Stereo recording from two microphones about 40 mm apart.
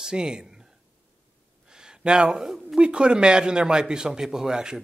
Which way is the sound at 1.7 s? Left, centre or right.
Centre.